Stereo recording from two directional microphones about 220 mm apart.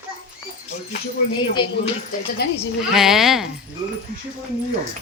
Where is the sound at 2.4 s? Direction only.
50° left (ahead or behind).